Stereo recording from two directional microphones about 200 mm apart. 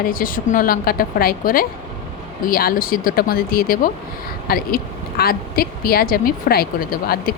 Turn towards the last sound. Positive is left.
turn(degrees=50)  # may be behind; listen again after turning